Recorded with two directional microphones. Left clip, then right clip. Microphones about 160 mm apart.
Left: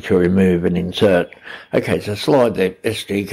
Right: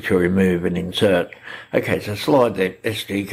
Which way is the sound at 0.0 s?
25° left (ahead or behind).